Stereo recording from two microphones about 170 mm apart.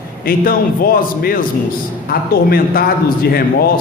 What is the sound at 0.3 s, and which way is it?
A man's voice, 55° left (ahead or behind).